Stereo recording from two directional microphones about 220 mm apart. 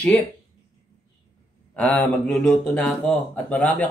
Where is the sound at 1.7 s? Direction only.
5° left (ahead or behind).